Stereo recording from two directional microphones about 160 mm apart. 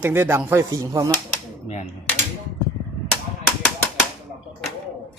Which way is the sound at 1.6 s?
45° left (ahead or behind).